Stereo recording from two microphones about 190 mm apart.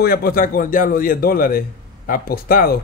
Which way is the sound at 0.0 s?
50° left (ahead or behind).